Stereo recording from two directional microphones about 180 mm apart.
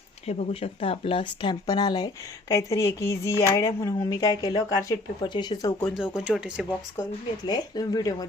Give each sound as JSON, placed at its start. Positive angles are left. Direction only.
{"t": 0.3, "sound": "speech", "side_deg": 35}
{"t": 6.0, "sound": "speech", "side_deg": -5}
{"t": 7.4, "sound": "speech", "side_deg": 25}